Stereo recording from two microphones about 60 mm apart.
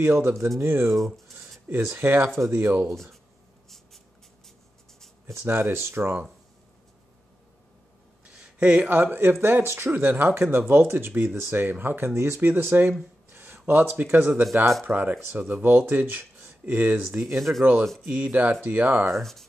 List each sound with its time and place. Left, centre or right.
0.0 s speech: right
0.6 s speech: right
0.8 s speech: centre
1.7 s speech: right
2.9 s speech: centre
5.3 s speech: right
8.3 s a sound: centre
8.7 s speech: right
13.3 s a sound: right
14.0 s speech: right
19.1 s speech: centre